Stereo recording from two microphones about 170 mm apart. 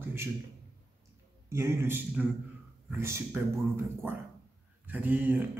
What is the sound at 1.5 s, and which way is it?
Speech, 15° right (ahead or behind).